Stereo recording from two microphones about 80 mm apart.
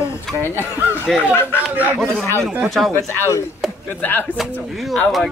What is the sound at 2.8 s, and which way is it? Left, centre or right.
Speech, centre.